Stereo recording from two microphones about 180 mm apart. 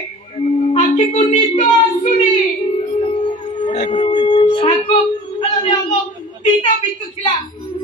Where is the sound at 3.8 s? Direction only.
35° left (ahead or behind).